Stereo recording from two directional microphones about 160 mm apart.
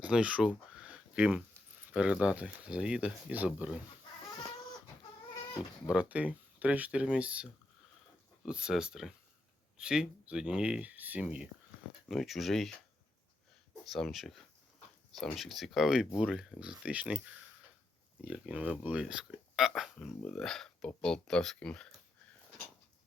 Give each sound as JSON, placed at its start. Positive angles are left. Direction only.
{"t": 0.0, "sound": "speech", "side_deg": -5}
{"t": 5.8, "sound": "speech", "side_deg": -5}
{"t": 8.4, "sound": "speech", "side_deg": -5}
{"t": 13.8, "sound": "speech", "side_deg": 0}
{"t": 18.2, "sound": "speech", "side_deg": -10}